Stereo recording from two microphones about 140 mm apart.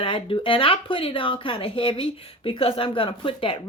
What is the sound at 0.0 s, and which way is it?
Speech, 40° left (ahead or behind).